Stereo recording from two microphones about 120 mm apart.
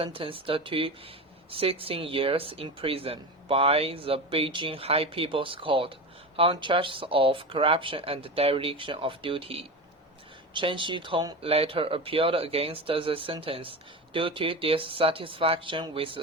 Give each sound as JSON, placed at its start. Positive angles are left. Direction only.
{"t": 0.0, "sound": "speech", "side_deg": -50}
{"t": 11.4, "sound": "speech", "side_deg": -55}